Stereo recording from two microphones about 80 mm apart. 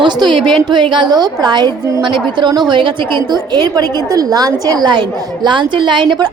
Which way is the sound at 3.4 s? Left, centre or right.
Right.